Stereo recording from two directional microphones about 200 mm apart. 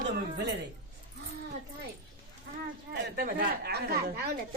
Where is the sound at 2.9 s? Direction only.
55° right (ahead or behind).